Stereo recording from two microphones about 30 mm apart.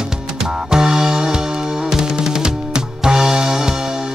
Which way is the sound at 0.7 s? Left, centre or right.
Right.